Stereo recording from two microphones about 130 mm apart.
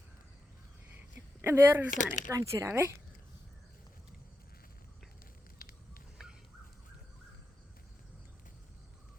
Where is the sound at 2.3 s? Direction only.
25° right (ahead or behind).